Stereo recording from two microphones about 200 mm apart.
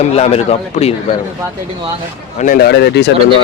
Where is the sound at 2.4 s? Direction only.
45° left (ahead or behind).